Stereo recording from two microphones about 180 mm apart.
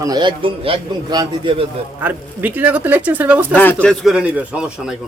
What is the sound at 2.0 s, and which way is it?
Speech, 10° right (ahead or behind).